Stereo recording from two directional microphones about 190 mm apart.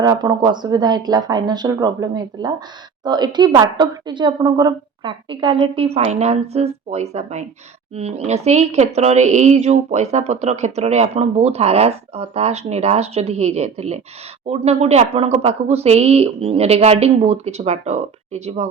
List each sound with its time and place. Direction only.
0.0 s a woman's voice: 20° right (ahead or behind)